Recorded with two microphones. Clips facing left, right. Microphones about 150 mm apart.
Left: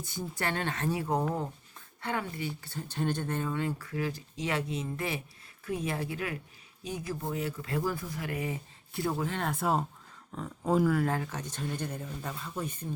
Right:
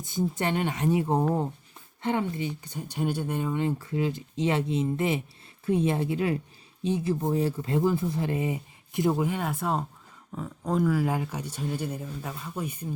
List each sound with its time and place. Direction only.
0.0 s speech: 20° right (ahead or behind)